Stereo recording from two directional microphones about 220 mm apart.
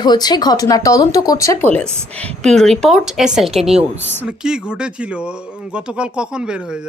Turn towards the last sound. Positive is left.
turn(degrees=-5)  # may be behind; listen again after turning